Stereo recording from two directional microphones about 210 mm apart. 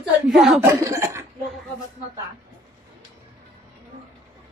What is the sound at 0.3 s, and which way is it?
Speech, centre (ahead or behind).